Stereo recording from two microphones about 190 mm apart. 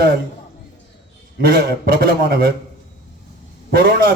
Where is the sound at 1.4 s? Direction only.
55° right (ahead or behind).